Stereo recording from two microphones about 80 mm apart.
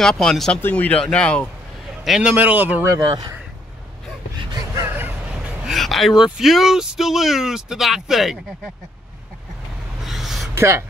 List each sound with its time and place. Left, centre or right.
0.0 s speech: centre
0.6 s speech: left
2.0 s a man's voice: centre
2.3 s a man's voice: right
3.0 s speech: right
4.4 s a sound: right
4.8 s vehicle: right
5.3 s speech: centre
10.0 s a sound: centre
10.5 s a sound: right